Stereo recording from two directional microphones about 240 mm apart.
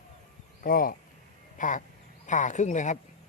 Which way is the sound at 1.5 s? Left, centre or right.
Left.